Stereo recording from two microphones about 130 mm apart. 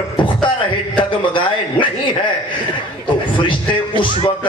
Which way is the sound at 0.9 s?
40° left (ahead or behind).